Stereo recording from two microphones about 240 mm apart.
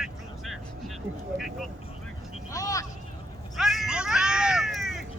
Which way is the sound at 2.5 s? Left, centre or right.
Centre.